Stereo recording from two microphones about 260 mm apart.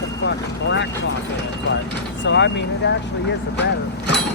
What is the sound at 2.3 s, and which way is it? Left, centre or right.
Speech, left.